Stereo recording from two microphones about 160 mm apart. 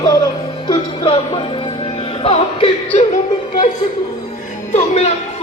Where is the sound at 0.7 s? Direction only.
35° left (ahead or behind).